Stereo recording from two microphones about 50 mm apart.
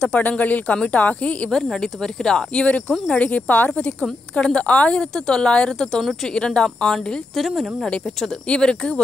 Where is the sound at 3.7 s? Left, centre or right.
Centre.